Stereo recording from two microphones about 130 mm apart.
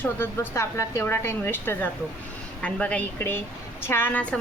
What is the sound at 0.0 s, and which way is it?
A woman's voice, 20° left (ahead or behind).